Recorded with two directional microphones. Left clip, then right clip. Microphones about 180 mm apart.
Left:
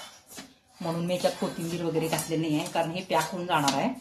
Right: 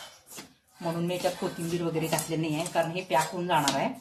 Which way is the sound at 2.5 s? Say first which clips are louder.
Right 1 dB; 15° left (ahead or behind).